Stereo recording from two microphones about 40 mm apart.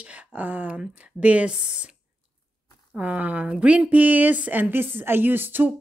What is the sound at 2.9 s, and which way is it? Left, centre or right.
Speech, right.